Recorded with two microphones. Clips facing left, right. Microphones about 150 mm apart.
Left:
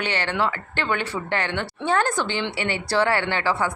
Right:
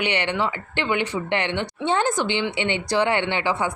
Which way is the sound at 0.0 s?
20° right (ahead or behind).